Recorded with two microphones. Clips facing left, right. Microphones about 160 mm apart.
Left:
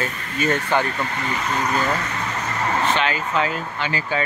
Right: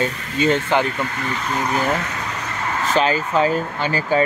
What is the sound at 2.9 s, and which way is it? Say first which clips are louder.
Speech: right 4 dB; 35° right (ahead or behind).